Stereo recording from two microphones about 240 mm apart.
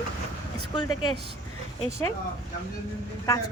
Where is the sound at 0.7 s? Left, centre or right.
Centre.